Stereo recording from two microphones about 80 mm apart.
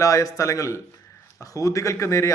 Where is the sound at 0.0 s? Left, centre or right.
Left.